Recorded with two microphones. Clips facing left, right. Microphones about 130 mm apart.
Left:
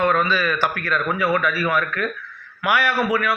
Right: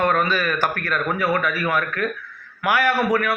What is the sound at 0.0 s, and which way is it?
A man's voice, 45° right (ahead or behind).